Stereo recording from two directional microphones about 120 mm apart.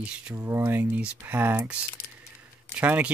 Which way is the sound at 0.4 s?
20° right (ahead or behind).